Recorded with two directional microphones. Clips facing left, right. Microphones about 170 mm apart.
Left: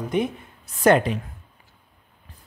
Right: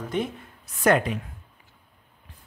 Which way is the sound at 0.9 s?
30° left (ahead or behind).